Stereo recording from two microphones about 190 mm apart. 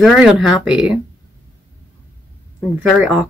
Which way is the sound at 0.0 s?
Centre (ahead or behind).